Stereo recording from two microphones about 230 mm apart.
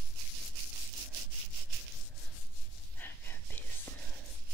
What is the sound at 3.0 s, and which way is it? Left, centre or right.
Whispering, centre.